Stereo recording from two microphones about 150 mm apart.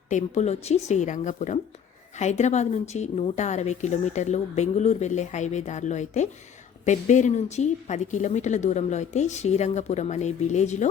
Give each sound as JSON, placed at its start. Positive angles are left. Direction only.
{"t": 0.1, "sound": "a woman's voice", "side_deg": 55}